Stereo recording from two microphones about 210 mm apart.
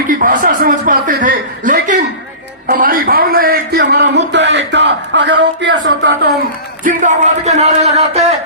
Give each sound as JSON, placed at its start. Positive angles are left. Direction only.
{"t": 0.1, "sound": "a man's voice", "side_deg": -40}
{"t": 6.8, "sound": "speech", "side_deg": -35}